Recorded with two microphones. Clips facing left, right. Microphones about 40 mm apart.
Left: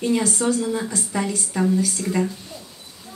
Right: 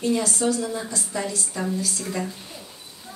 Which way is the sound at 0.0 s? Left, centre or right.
Left.